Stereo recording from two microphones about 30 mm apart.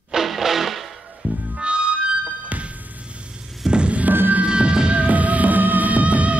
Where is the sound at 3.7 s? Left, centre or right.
Right.